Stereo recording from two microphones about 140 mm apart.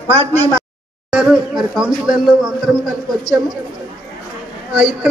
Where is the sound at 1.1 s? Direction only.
5° right (ahead or behind).